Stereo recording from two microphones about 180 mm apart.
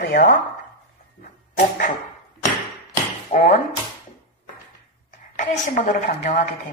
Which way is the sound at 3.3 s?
50° left (ahead or behind).